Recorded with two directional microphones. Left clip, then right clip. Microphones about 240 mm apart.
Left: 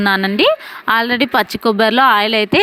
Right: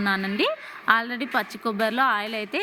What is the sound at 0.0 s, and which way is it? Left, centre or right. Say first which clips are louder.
A woman's voice: left 11 dB; left.